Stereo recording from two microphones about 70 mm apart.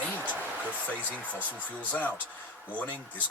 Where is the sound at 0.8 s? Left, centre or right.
Left.